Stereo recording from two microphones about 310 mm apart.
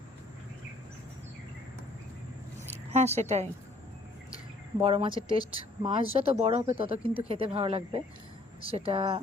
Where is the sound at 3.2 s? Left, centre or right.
Right.